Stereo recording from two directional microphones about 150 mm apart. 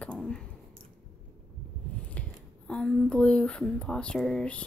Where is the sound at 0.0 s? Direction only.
5° left (ahead or behind).